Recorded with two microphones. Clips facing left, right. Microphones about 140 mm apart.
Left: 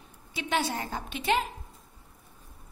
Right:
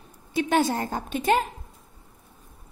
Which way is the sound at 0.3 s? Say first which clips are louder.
Right 7 dB; 45° right (ahead or behind).